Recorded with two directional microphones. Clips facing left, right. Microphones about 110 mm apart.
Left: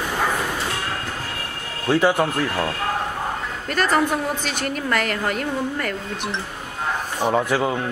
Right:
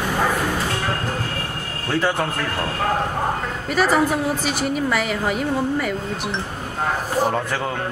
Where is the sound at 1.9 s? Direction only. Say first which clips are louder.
Left 4 dB; 15° left (ahead or behind).